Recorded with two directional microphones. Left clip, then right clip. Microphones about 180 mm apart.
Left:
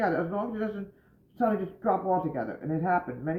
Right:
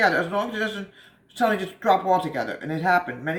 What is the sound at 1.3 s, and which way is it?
Speech, 25° right (ahead or behind).